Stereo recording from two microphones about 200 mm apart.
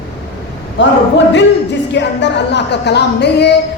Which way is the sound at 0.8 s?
65° left (ahead or behind).